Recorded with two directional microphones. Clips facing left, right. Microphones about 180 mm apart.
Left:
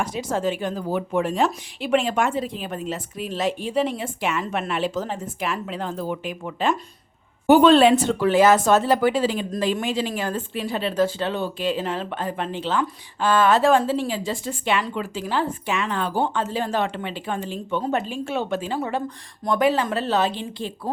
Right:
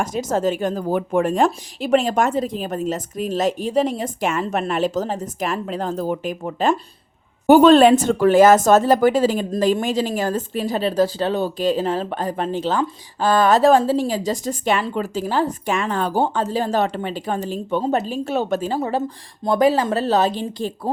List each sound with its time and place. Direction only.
0.0 s speech: 45° right (ahead or behind)